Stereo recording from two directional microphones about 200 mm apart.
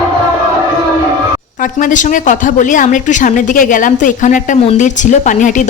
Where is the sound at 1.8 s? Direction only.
40° left (ahead or behind).